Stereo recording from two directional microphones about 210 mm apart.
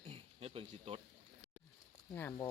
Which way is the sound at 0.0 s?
30° right (ahead or behind).